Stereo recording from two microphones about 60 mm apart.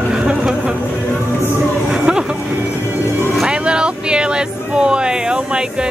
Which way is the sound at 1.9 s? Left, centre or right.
Centre.